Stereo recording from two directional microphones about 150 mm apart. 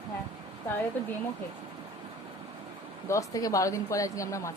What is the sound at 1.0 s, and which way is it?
Speech, 15° left (ahead or behind).